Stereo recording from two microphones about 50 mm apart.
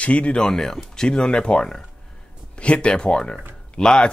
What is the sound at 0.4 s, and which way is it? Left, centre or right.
Speech, centre.